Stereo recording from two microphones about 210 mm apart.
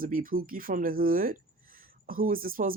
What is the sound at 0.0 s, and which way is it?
Speech, 40° right (ahead or behind).